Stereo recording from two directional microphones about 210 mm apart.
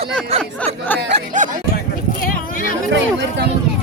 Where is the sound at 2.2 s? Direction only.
40° left (ahead or behind).